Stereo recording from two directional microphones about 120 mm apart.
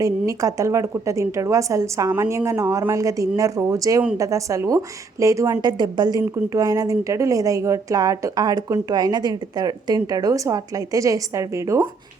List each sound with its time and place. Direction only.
0.0 s speech: 30° right (ahead or behind)